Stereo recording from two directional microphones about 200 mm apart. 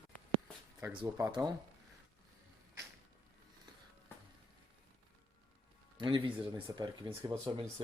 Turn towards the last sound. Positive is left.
turn(degrees=-20)  # may be behind; listen again after turning